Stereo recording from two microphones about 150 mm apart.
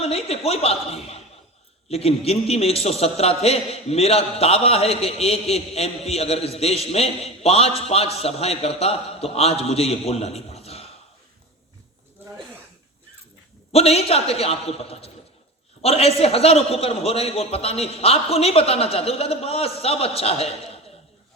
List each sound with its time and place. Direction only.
0.0 s a woman's voice: 40° left (ahead or behind)
13.7 s a man's voice: 40° left (ahead or behind)